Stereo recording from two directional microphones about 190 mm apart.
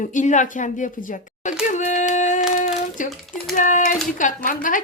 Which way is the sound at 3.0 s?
45° left (ahead or behind).